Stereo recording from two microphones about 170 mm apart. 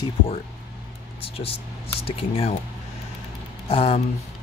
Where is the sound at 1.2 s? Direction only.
35° left (ahead or behind).